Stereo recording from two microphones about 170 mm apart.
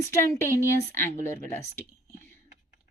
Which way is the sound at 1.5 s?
15° left (ahead or behind).